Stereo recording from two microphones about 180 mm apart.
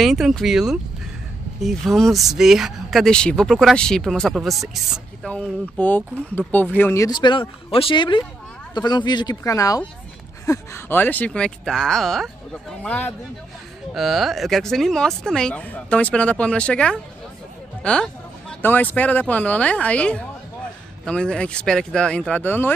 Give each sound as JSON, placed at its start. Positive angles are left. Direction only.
{"t": 0.0, "sound": "speech", "side_deg": 0}